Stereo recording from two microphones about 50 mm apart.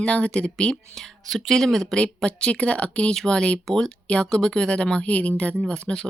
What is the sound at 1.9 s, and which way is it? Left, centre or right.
Speech, centre.